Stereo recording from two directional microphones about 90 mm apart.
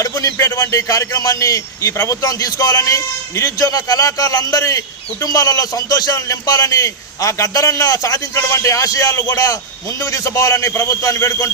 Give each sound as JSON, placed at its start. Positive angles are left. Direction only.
{"t": 0.0, "sound": "a man's voice", "side_deg": 40}